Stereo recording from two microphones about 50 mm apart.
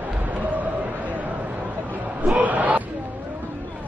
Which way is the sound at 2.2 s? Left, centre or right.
Right.